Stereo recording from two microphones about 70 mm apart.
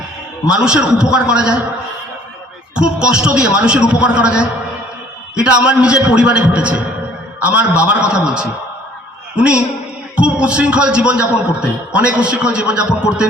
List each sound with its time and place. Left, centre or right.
0.4 s a man's voice: centre
2.7 s a man's voice: centre